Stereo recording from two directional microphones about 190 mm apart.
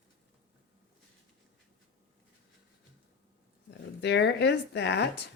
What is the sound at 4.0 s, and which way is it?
Speech, 65° left (ahead or behind).